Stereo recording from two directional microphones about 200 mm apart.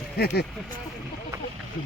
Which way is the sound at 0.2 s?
50° left (ahead or behind).